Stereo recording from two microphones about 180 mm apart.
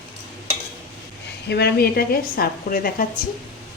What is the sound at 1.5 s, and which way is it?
A woman's voice, 65° left (ahead or behind).